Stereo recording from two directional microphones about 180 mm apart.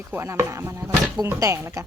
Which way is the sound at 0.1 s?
15° right (ahead or behind).